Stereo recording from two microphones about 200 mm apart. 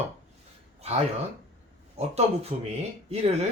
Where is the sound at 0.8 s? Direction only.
30° right (ahead or behind).